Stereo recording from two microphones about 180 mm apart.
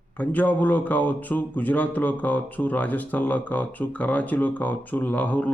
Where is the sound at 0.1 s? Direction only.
10° left (ahead or behind).